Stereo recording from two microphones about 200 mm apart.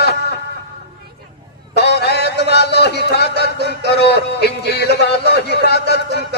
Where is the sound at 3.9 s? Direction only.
55° left (ahead or behind).